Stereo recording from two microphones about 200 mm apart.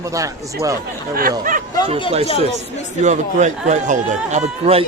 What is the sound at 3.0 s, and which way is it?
Speech, 35° right (ahead or behind).